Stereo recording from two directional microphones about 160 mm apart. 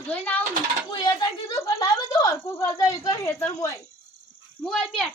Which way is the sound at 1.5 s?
25° left (ahead or behind).